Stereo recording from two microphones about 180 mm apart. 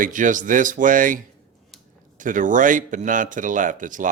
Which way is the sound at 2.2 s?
45° right (ahead or behind).